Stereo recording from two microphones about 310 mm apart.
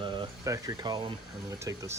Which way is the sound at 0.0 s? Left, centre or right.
Centre.